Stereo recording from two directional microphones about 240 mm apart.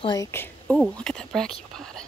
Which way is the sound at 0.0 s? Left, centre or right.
Centre.